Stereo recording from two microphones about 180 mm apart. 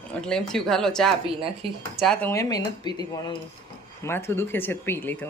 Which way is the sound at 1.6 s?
30° right (ahead or behind).